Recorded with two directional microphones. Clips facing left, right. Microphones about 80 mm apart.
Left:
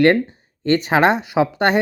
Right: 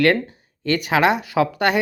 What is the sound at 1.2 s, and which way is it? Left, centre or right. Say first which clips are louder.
Speech: left 2 dB; left.